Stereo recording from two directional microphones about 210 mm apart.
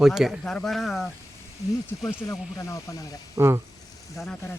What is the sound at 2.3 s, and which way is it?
Speech, 15° left (ahead or behind).